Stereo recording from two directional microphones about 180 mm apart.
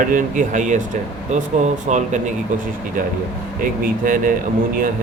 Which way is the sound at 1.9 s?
40° right (ahead or behind).